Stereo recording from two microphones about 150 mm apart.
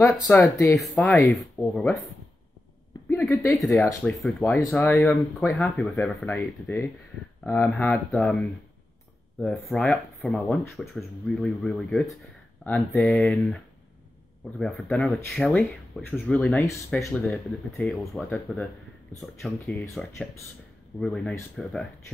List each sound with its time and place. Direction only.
0.3 s speech: 15° left (ahead or behind)
3.1 s a sound: 15° left (ahead or behind)
3.5 s speech: centre (ahead or behind)
4.8 s speech: 15° left (ahead or behind)
5.6 s speech: centre (ahead or behind)
6.3 s speech: 15° left (ahead or behind)
14.6 s speech: 5° left (ahead or behind)